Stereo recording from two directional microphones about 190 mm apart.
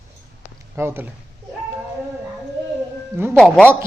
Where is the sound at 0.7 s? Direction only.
10° right (ahead or behind).